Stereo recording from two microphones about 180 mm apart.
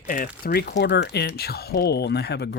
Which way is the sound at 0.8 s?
70° left (ahead or behind).